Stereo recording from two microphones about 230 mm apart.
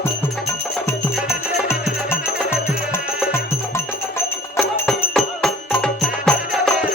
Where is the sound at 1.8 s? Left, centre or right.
Centre.